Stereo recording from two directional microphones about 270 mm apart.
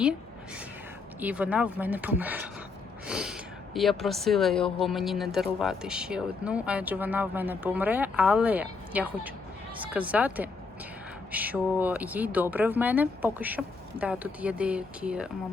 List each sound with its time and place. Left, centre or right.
1.2 s speech: centre